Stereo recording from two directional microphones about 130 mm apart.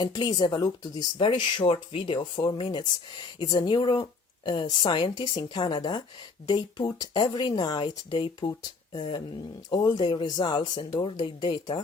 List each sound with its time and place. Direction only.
0.0 s speech: 35° left (ahead or behind)